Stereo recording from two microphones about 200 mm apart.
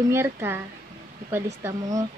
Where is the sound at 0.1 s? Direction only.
10° right (ahead or behind).